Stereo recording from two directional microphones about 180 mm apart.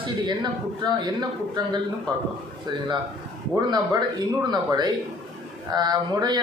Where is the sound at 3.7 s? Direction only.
25° right (ahead or behind).